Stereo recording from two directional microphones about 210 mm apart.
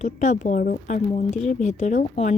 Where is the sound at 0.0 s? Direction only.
35° left (ahead or behind).